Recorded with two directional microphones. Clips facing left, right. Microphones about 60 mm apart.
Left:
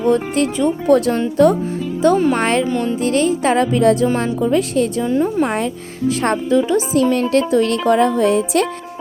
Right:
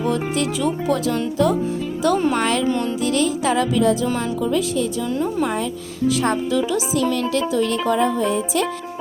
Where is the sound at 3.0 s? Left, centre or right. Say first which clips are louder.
Left 4 dB; left.